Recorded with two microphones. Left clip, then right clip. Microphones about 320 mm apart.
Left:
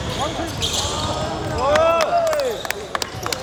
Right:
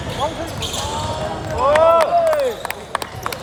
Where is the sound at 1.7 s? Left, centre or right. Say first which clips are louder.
Right 4 dB; right.